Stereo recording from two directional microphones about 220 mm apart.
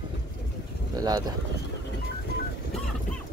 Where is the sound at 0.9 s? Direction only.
15° right (ahead or behind).